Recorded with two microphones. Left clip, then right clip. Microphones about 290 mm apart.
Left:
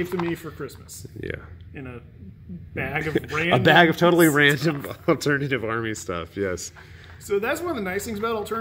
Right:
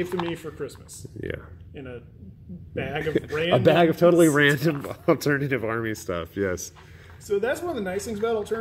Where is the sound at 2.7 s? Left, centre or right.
Left.